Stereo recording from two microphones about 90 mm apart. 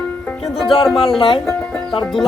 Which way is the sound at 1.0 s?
80° left.